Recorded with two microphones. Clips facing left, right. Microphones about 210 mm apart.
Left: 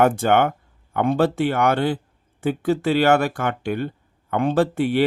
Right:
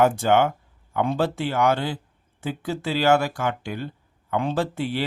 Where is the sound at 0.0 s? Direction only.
60° left (ahead or behind).